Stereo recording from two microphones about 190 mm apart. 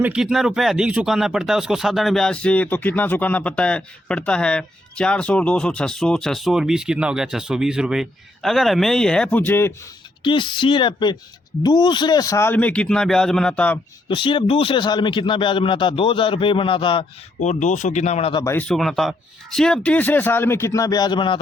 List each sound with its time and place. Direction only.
0.0 s speech: 5° right (ahead or behind)
10.2 s a man's voice: 25° left (ahead or behind); by 13.7 s 5° left (ahead or behind)
14.1 s a man's voice: 25° left (ahead or behind)
17.4 s speech: 40° left (ahead or behind)
18.4 s speech: 10° left (ahead or behind); by 21.3 s 25° left (ahead or behind)